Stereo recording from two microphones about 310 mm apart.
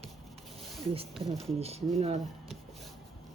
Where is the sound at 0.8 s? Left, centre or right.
Centre.